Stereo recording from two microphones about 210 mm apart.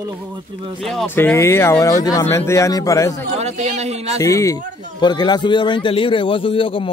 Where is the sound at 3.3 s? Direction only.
30° right (ahead or behind).